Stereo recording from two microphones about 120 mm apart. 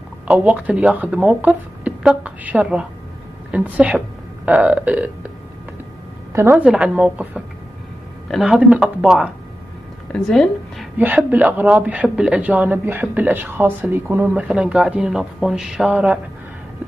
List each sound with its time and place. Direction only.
0.3 s a woman's voice: 10° right (ahead or behind)
6.3 s a woman's voice: 20° right (ahead or behind)
6.6 s a woman's voice: 10° right (ahead or behind)
10.1 s speech: 5° left (ahead or behind)
11.0 s a woman's voice: 15° right (ahead or behind)